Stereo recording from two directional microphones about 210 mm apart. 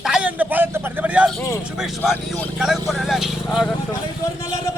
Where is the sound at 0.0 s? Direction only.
5° right (ahead or behind).